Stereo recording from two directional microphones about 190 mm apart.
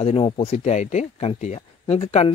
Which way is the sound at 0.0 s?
30° left (ahead or behind).